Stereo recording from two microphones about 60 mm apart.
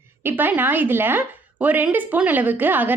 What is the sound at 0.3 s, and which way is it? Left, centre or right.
A woman's voice, right.